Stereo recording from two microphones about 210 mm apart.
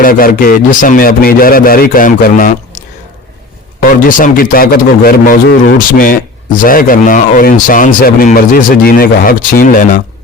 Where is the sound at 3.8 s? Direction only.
40° left (ahead or behind).